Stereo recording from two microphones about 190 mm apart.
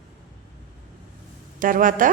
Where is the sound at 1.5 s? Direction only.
45° right (ahead or behind).